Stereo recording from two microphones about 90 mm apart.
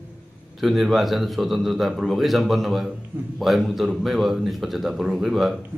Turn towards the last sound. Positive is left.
turn(degrees=0)  # may be behind; listen again after turning